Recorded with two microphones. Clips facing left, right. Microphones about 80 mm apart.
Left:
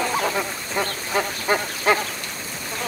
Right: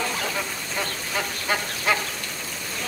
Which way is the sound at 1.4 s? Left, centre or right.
Left.